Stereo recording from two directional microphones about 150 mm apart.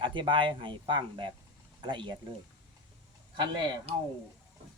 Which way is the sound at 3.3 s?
30° right (ahead or behind).